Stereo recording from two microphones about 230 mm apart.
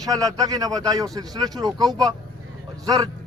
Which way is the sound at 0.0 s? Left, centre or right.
Centre.